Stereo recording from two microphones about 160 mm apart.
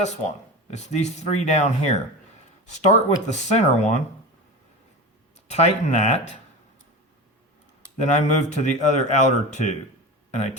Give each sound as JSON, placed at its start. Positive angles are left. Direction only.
{"t": 0.0, "sound": "speech", "side_deg": 45}
{"t": 5.5, "sound": "speech", "side_deg": 45}
{"t": 7.9, "sound": "speech", "side_deg": 50}